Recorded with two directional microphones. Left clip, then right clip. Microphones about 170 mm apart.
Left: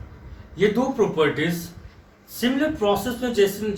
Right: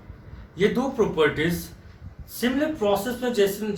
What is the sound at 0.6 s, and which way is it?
Speech, 20° right (ahead or behind).